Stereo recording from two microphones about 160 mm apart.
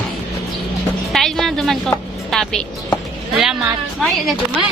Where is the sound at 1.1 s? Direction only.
Centre (ahead or behind).